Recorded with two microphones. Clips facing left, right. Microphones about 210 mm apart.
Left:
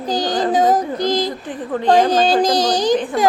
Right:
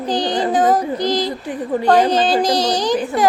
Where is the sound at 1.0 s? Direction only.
50° left (ahead or behind).